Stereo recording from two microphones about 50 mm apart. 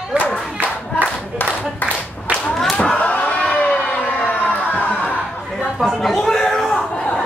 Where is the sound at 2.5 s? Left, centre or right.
Centre.